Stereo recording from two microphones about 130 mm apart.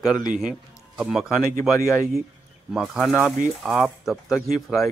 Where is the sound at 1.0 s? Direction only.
5° right (ahead or behind).